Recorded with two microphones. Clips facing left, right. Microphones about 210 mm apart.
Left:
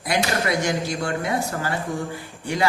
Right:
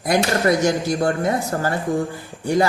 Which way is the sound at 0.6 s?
45° right (ahead or behind).